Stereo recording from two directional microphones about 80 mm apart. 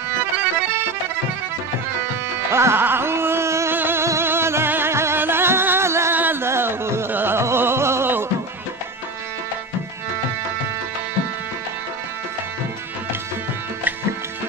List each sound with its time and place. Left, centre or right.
2.5 s carnatic music: right
3.7 s music: right